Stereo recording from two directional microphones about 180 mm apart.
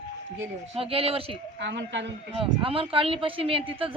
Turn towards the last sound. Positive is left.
turn(degrees=-30)  # may be behind; listen again after turning